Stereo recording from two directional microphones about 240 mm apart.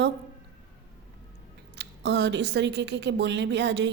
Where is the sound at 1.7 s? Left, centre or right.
Right.